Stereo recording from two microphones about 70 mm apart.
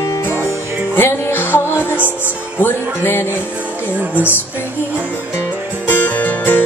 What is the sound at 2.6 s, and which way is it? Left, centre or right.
Speech, left.